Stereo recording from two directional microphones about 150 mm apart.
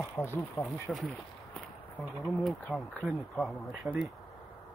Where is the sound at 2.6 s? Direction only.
10° left (ahead or behind).